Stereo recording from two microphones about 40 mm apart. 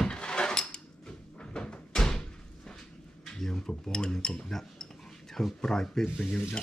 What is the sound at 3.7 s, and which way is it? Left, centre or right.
Speech, centre.